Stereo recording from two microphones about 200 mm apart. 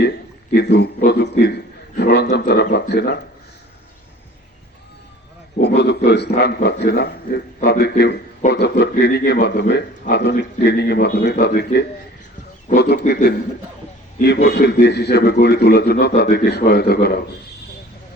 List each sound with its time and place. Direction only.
0.5 s a man's voice: 55° left (ahead or behind)
5.5 s a man's voice: 55° left (ahead or behind)
14.4 s a man's voice: 55° left (ahead or behind)